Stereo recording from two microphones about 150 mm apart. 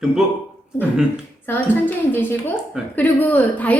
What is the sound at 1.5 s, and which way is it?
Speech, 15° left (ahead or behind).